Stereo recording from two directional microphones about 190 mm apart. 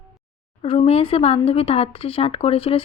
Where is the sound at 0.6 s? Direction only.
30° left (ahead or behind).